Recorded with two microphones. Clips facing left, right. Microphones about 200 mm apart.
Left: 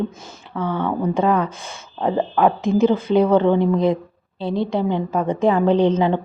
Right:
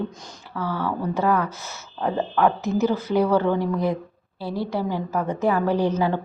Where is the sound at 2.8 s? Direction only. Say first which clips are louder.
Left 5 dB; 25° left (ahead or behind).